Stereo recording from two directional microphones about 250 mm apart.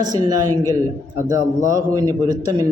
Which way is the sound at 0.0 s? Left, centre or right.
Centre.